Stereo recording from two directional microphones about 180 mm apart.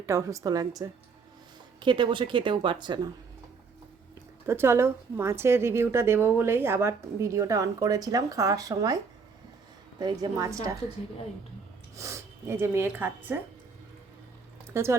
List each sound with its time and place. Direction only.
0.0 s speech: 15° right (ahead or behind)
4.4 s a woman's voice: 15° right (ahead or behind)
10.0 s speech: 20° right (ahead or behind)
11.9 s a woman's voice: 15° right (ahead or behind)
14.7 s speech: 15° right (ahead or behind)